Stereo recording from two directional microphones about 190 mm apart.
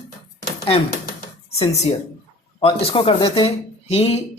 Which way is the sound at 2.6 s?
30° left (ahead or behind).